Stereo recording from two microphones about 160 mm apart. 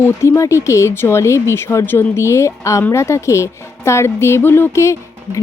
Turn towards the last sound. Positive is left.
turn(degrees=20)  # may be behind; listen again after turning